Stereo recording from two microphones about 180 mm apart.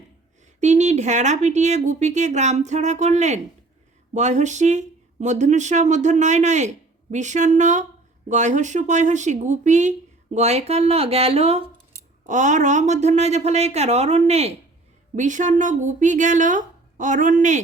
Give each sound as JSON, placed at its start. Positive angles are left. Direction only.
{"t": 0.6, "sound": "speech", "side_deg": -40}